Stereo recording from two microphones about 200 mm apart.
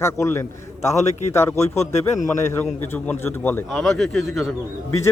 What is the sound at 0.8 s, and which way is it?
A man's voice, 35° left (ahead or behind).